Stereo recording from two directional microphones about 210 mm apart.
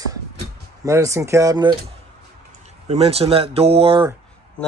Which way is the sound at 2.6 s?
30° right (ahead or behind).